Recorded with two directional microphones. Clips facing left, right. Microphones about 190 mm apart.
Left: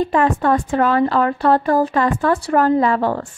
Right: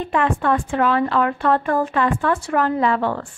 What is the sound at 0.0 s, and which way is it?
Speech, 40° left (ahead or behind).